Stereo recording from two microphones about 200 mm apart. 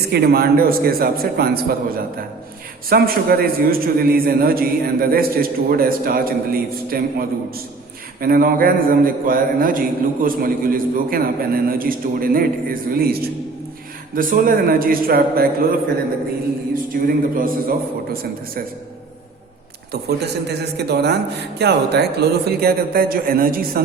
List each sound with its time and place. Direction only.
0.1 s a man's voice: 50° right (ahead or behind)
17.1 s a man's voice: 45° right (ahead or behind)
19.9 s a man's voice: 55° right (ahead or behind)